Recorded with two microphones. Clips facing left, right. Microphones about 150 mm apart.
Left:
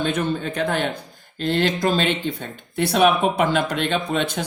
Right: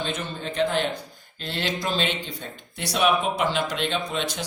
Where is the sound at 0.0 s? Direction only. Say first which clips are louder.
Left 7 dB; 55° left (ahead or behind).